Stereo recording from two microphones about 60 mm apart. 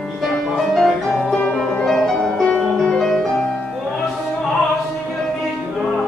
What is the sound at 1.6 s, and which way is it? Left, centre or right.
Music, centre.